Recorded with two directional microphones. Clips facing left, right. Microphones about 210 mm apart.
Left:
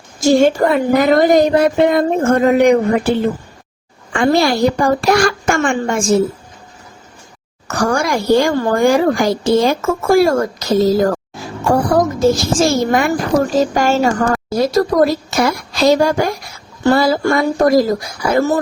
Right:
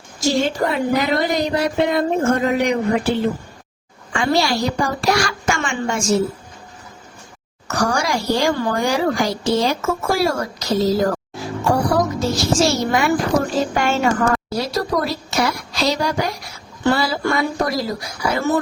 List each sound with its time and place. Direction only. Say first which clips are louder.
0.2 s a woman's voice: left 7 dB; 50° left (ahead or behind)
7.7 s a woman's voice: left 4 dB; 55° left (ahead or behind)
11.9 s a child's voice: left 6 dB; 50° left (ahead or behind)